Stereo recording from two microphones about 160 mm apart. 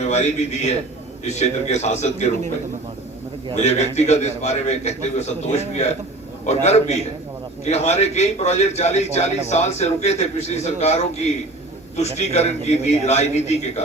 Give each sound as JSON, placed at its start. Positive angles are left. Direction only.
{"t": 0.1, "sound": "a man's voice", "side_deg": 45}
{"t": 3.6, "sound": "a man's voice", "side_deg": 45}